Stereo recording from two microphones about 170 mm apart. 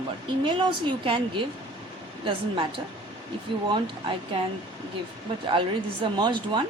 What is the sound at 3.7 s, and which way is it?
Speech, 30° right (ahead or behind).